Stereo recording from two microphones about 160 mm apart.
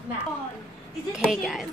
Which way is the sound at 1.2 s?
Centre (ahead or behind).